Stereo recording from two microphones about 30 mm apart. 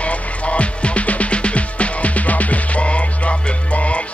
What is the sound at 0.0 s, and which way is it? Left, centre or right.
Music, left.